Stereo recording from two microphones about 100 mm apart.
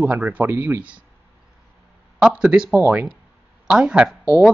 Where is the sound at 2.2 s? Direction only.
10° right (ahead or behind).